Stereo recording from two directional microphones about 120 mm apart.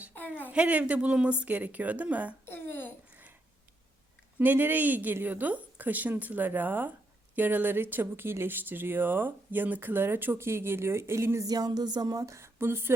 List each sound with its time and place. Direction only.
0.1 s a sound: 15° left (ahead or behind)
0.5 s a woman's voice: 10° right (ahead or behind)
2.5 s babbling: 15° left (ahead or behind)
4.4 s a woman's voice: 15° right (ahead or behind)